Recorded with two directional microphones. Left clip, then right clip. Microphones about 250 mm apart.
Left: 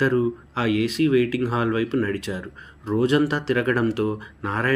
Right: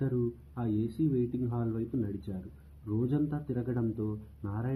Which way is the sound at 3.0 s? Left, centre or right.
Left.